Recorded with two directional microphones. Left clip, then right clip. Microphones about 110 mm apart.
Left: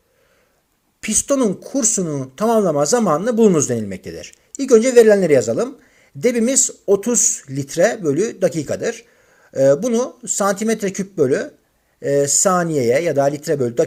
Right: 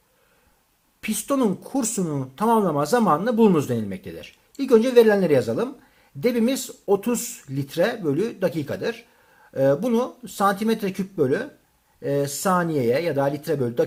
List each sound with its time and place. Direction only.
1.0 s speech: 25° left (ahead or behind)